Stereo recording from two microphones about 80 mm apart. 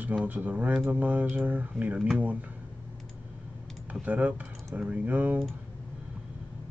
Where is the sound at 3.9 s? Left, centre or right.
Centre.